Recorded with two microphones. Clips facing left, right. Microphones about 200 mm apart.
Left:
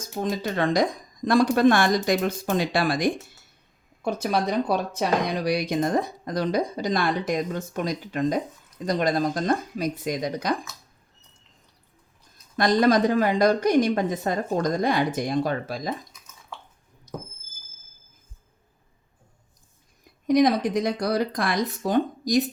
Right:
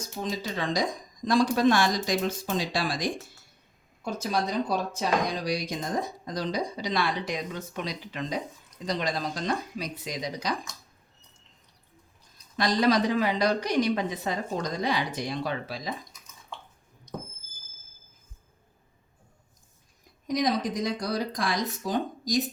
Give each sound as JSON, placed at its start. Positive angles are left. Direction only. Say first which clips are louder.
{"t": 0.2, "sound": "a woman's voice", "louder": "left 6 dB", "side_deg": 55}
{"t": 12.5, "sound": "a woman's voice", "louder": "left 4 dB", "side_deg": 50}
{"t": 17.1, "sound": "a sound", "louder": "left 2 dB", "side_deg": 5}
{"t": 20.2, "sound": "speech", "louder": "left 7 dB", "side_deg": 60}